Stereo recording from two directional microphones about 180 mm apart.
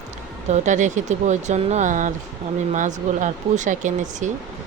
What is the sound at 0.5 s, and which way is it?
Speech, 40° right (ahead or behind).